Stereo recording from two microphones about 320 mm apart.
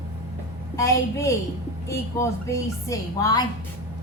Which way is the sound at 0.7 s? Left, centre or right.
Centre.